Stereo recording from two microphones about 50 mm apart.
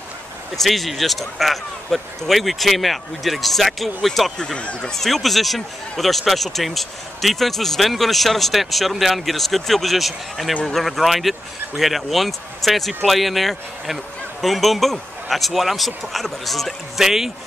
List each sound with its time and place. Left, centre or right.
0.6 s speech: centre
4.6 s speech: left
4.9 s speech: centre